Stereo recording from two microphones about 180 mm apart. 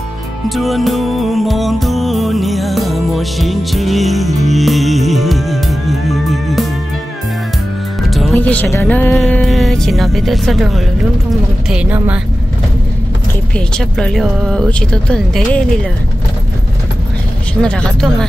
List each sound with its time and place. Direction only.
0.5 s music: centre (ahead or behind)
8.1 s speech: centre (ahead or behind)
13.7 s speech: 5° left (ahead or behind)
17.6 s speech: 5° left (ahead or behind)